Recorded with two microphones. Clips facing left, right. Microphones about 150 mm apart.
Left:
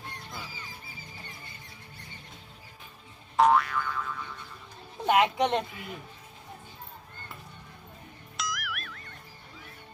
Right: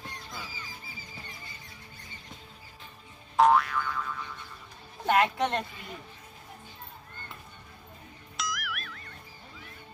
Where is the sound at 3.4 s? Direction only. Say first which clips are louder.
Even; centre (ahead or behind).